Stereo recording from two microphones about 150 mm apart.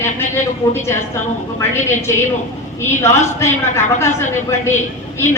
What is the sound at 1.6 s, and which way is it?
A woman's voice, 15° left (ahead or behind).